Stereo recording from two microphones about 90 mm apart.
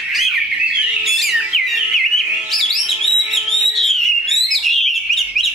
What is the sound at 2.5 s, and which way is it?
Bird, centre (ahead or behind).